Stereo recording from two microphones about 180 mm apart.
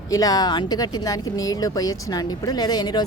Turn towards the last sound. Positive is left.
turn(degrees=20)  # may be behind; listen again after turning